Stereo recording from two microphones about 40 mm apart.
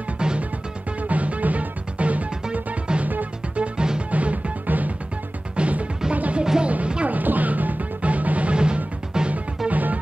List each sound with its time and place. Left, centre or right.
0.2 s music: right
1.0 s music: right
2.9 s music: right
3.5 s music: right
7.1 s music: right
8.5 s music: right
9.7 s music: right